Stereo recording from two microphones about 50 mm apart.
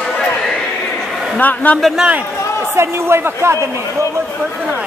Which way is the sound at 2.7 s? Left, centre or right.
Right.